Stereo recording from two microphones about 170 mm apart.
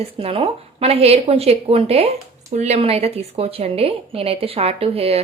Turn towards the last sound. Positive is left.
turn(degrees=-35)  # may be behind; listen again after turning